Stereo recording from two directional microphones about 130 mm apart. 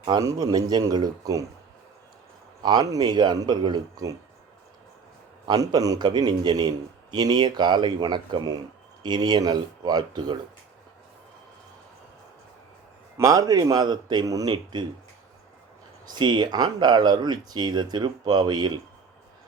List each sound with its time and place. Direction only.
0.0 s speech: 30° right (ahead or behind)
2.6 s a man's voice: 35° right (ahead or behind)
5.5 s a man's voice: 30° right (ahead or behind)
13.1 s speech: 25° right (ahead or behind)
16.0 s a man's voice: 35° right (ahead or behind)